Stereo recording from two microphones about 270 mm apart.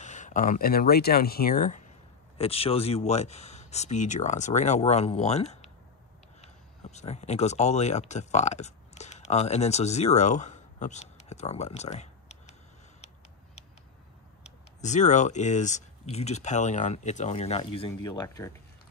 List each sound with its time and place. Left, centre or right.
0.0 s speech: left
14.4 s speech: left